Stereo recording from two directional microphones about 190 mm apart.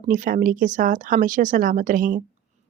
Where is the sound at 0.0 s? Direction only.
45° right (ahead or behind).